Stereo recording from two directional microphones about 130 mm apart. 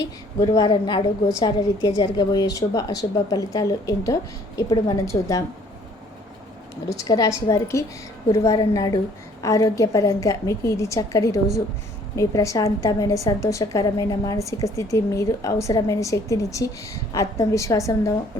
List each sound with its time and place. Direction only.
0.3 s a woman's voice: 30° left (ahead or behind)
6.9 s a woman's voice: 25° left (ahead or behind)